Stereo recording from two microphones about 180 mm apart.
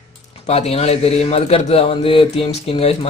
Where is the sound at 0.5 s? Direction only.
35° left (ahead or behind).